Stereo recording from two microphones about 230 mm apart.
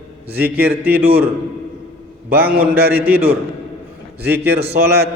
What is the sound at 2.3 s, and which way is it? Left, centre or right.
Speech, centre.